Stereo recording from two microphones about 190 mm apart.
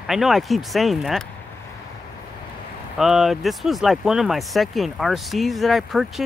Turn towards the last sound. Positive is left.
turn(degrees=0)  # may be behind; listen again after turning